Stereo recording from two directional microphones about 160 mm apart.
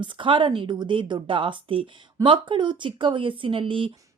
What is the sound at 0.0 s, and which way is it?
A woman's voice, 30° right (ahead or behind).